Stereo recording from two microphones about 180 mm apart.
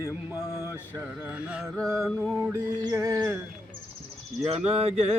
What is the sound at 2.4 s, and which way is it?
Mantra, 15° right (ahead or behind).